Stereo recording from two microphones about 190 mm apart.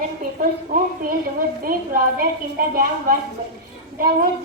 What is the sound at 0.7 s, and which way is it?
A woman's voice, 45° right (ahead or behind).